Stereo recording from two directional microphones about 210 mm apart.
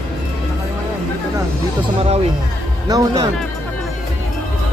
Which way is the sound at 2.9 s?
15° right (ahead or behind).